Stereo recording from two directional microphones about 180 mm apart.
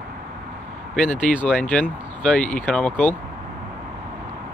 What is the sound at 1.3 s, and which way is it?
Speech, 45° left (ahead or behind).